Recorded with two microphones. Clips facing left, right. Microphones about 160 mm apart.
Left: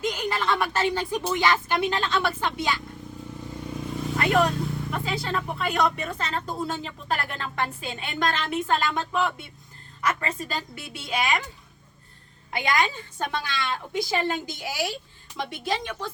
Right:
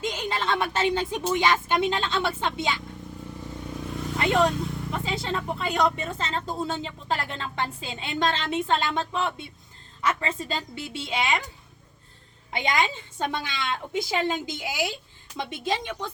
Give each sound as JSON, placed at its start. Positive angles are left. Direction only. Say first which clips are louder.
{"t": 0.0, "sound": "speech", "louder": "left 2 dB", "side_deg": -20}
{"t": 3.7, "sound": "vehicle", "louder": "left 2 dB", "side_deg": 5}
{"t": 4.2, "sound": "speech", "louder": "even", "side_deg": -25}
{"t": 12.5, "sound": "speech", "louder": "left 1 dB", "side_deg": -20}